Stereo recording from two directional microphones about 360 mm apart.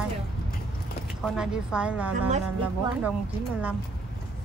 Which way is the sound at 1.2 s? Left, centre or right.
Centre.